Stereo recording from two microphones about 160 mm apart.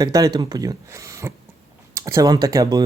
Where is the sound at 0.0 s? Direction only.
25° right (ahead or behind).